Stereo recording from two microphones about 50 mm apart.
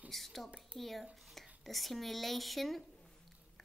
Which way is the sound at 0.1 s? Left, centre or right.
Centre.